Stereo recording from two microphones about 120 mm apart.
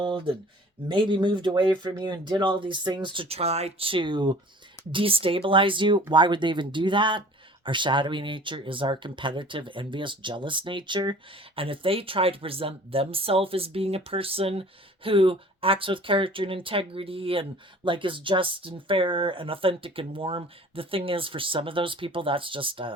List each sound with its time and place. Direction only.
0.9 s speech: 45° right (ahead or behind)